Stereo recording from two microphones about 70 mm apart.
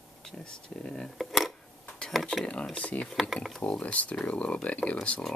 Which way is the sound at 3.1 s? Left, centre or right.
Centre.